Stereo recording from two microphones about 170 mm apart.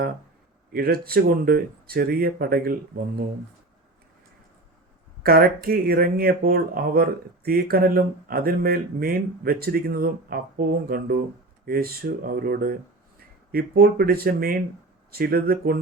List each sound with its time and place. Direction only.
0.7 s speech: 65° right (ahead or behind)
5.2 s speech: 60° right (ahead or behind)